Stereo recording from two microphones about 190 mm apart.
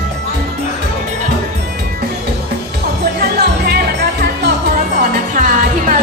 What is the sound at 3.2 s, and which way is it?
Music, 55° right (ahead or behind).